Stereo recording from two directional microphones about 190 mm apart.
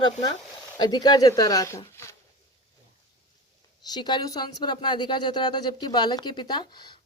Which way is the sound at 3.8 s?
20° left (ahead or behind).